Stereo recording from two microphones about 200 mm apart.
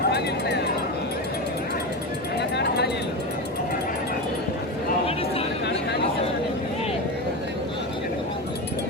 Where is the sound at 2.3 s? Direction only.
55° left (ahead or behind).